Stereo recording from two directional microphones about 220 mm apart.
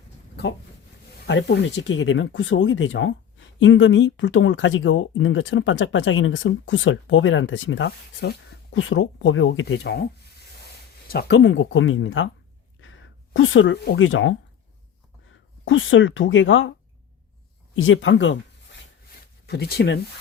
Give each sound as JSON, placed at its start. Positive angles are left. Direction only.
{"t": 1.3, "sound": "speech", "side_deg": 55}
{"t": 11.1, "sound": "speech", "side_deg": 45}
{"t": 15.6, "sound": "speech", "side_deg": 60}
{"t": 17.7, "sound": "speech", "side_deg": 60}
{"t": 19.5, "sound": "speech", "side_deg": 45}